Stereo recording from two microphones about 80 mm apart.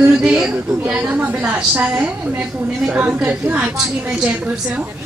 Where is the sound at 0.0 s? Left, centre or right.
Centre.